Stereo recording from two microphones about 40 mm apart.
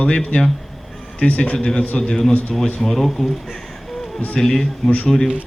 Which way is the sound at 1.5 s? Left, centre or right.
Left.